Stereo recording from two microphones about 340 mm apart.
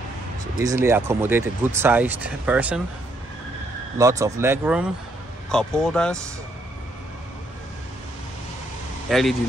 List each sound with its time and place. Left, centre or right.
0.6 s speech: centre
4.0 s speech: centre
9.1 s speech: centre